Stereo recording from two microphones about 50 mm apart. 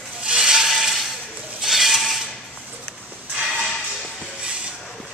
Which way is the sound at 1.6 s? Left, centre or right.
Centre.